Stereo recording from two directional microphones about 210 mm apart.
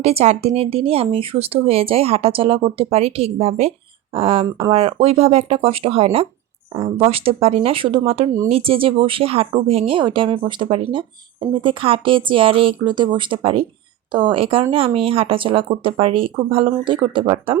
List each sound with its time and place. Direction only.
0.0 s speech: 30° right (ahead or behind)